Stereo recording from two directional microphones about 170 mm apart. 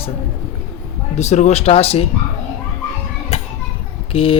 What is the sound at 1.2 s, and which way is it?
Speech, 40° left (ahead or behind).